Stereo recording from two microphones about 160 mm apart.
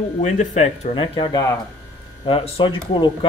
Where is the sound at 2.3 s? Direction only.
35° left (ahead or behind).